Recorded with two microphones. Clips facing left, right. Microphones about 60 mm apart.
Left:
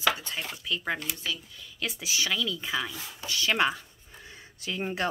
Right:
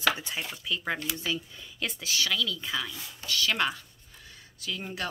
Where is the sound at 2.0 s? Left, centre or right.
Centre.